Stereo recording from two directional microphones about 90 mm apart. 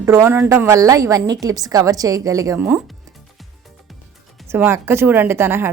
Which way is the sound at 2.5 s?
25° right (ahead or behind).